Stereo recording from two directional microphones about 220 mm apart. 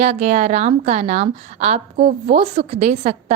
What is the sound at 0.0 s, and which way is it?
A woman's voice, 30° right (ahead or behind).